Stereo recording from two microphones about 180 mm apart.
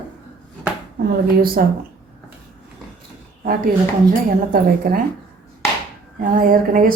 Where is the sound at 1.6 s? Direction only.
55° right (ahead or behind).